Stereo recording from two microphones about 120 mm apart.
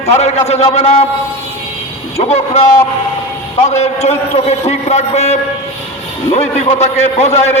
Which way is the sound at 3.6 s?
65° left (ahead or behind).